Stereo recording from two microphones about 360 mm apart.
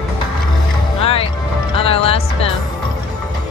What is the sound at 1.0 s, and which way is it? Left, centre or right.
Music, centre.